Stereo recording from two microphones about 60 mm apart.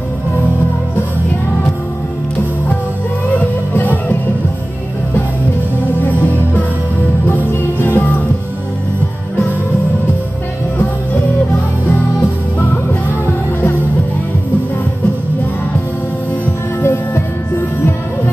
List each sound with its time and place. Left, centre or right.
5.9 s music: left
16.8 s music: left